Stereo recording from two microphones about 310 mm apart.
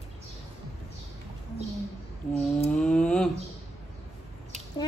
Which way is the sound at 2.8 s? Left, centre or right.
Centre.